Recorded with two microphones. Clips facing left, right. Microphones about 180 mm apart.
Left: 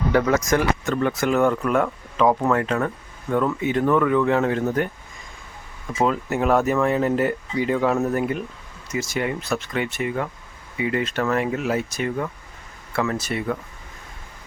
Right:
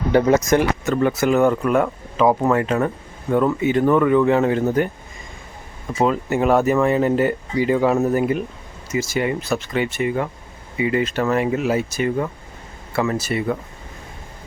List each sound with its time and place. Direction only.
0.1 s speech: 25° right (ahead or behind)
0.9 s speech: 5° right (ahead or behind)
6.0 s speech: centre (ahead or behind)